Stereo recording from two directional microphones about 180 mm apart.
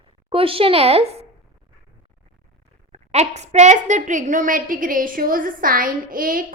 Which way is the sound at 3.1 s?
40° right (ahead or behind).